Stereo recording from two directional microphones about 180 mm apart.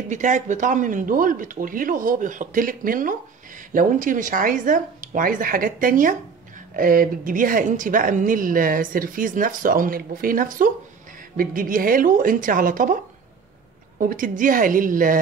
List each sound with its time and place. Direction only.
0.1 s speech: 45° right (ahead or behind)